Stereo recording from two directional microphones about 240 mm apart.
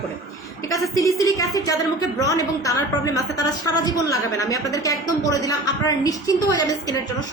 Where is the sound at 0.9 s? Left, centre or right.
Centre.